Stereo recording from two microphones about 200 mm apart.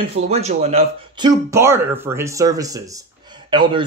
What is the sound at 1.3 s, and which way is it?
Speech, 15° right (ahead or behind).